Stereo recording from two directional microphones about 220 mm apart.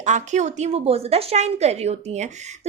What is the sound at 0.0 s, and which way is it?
A woman's voice, 30° right (ahead or behind).